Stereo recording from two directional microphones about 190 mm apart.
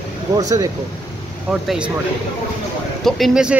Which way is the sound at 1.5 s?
5° right (ahead or behind).